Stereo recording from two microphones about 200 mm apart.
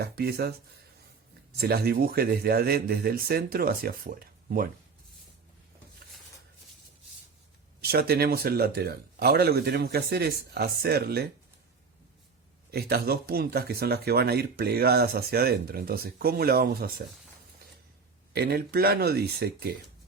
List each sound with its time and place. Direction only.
0.0 s speech: 50° right (ahead or behind)
1.5 s speech: 50° right (ahead or behind)
7.8 s speech: 50° right (ahead or behind)
12.7 s speech: 50° right (ahead or behind)
18.3 s speech: 50° right (ahead or behind)